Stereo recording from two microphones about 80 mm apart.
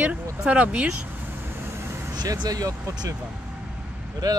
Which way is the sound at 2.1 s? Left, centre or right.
Right.